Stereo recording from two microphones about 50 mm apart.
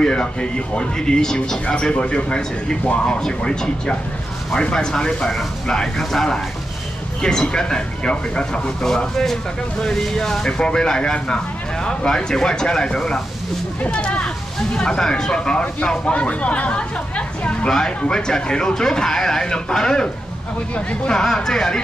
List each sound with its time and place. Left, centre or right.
0.0 s speech: centre
16.1 s speech: left
20.7 s speech: left
21.1 s speech: centre